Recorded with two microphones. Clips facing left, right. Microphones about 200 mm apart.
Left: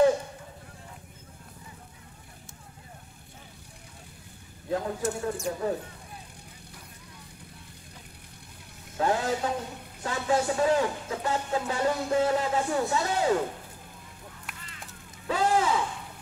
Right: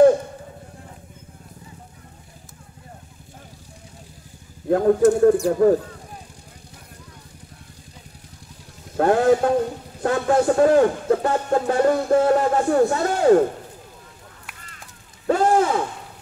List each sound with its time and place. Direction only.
4.6 s a man's voice: 55° right (ahead or behind)
8.9 s a man's voice: 55° right (ahead or behind)
15.2 s boat: 50° right (ahead or behind)